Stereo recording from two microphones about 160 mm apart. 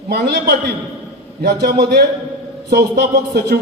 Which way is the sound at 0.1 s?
90° right.